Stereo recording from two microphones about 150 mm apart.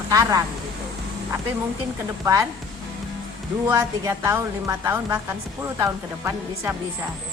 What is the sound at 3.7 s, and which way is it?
A woman's voice, 20° right (ahead or behind).